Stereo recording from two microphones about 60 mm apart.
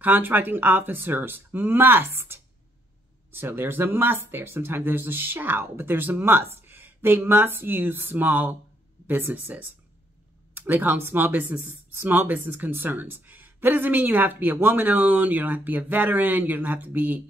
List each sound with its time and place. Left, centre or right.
0.0 s speech: right